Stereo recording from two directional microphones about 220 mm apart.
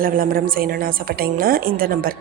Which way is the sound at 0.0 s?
40° right (ahead or behind).